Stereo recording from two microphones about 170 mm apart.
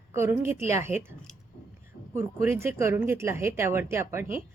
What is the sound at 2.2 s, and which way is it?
A woman's voice, 15° right (ahead or behind).